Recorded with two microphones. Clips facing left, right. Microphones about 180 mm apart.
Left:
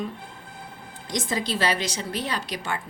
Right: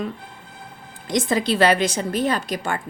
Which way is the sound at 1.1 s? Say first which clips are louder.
Right 7 dB; 60° right (ahead or behind).